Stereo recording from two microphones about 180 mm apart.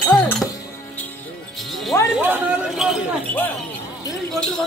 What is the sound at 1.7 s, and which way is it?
Music, centre (ahead or behind).